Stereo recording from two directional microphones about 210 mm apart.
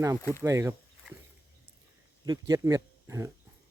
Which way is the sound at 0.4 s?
15° right (ahead or behind).